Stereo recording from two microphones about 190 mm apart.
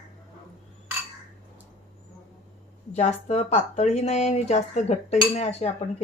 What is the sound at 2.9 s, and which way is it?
Speech, 35° left (ahead or behind).